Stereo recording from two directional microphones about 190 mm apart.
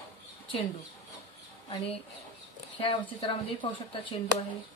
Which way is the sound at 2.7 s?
30° left (ahead or behind).